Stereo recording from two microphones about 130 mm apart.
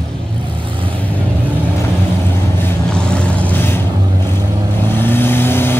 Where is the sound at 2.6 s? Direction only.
5° left (ahead or behind).